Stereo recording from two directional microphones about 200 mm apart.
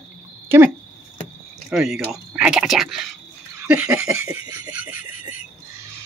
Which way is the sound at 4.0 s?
90° right.